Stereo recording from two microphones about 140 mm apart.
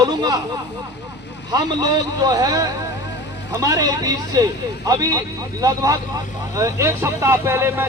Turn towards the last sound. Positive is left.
turn(degrees=-15)  # may be behind; listen again after turning